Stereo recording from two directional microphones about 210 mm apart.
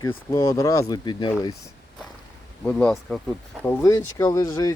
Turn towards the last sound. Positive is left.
turn(degrees=15)  # may be behind; listen again after turning